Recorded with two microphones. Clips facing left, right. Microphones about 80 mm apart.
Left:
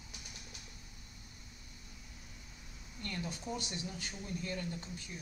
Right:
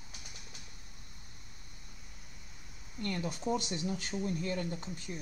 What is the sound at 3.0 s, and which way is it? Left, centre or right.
Speech, right.